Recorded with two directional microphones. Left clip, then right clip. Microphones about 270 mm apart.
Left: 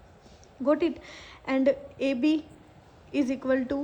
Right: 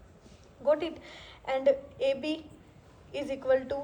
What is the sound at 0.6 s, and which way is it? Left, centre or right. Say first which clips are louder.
A woman's voice: left 2 dB; left.